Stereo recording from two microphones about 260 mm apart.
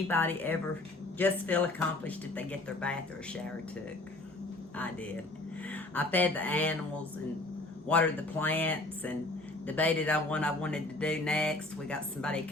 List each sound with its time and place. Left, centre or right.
0.1 s speech: centre
5.7 s a sound: centre
7.9 s speech: centre